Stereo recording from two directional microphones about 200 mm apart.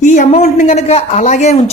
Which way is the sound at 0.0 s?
35° left (ahead or behind).